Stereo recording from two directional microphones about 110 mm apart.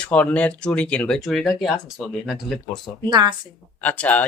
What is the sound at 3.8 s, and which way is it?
Speech, 15° left (ahead or behind).